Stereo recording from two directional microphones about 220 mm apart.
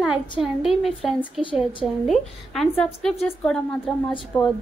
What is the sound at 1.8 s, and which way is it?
Speech, centre (ahead or behind).